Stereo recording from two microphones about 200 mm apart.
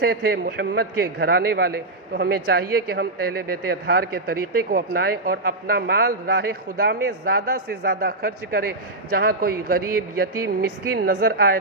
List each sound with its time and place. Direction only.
0.0 s a man's voice: 50° right (ahead or behind)